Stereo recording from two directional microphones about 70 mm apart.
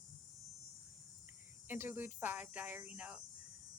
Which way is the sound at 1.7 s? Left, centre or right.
Right.